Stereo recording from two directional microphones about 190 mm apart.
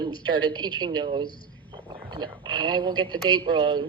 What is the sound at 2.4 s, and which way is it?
Speech, 25° right (ahead or behind).